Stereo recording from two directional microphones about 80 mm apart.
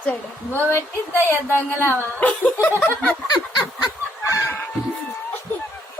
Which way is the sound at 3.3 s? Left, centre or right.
Left.